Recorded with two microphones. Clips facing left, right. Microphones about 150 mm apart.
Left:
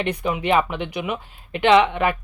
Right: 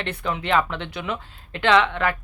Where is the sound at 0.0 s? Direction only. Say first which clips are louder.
Left 4 dB; 15° left (ahead or behind).